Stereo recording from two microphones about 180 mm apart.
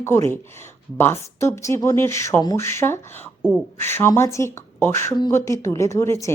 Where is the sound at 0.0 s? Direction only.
15° left (ahead or behind).